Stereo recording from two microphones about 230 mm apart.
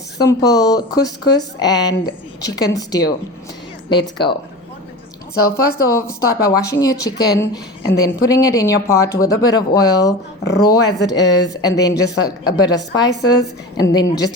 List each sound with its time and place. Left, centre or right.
0.2 s speech: centre
5.5 s speech: centre
11.2 s a woman's voice: left
11.6 s speech: centre